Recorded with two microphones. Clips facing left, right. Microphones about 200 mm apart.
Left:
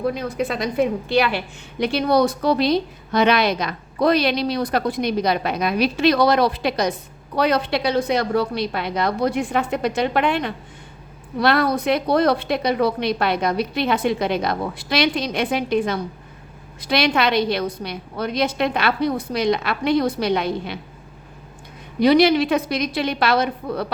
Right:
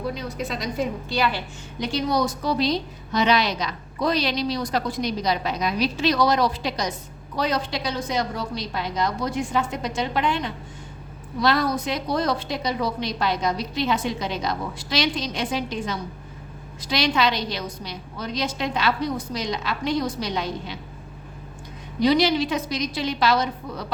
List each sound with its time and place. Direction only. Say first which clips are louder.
0.1 s a woman's voice: left 5 dB; 55° left (ahead or behind)
22.0 s a woman's voice: left 5 dB; 60° left (ahead or behind)